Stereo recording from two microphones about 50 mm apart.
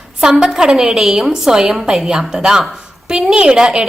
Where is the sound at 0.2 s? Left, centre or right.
Centre.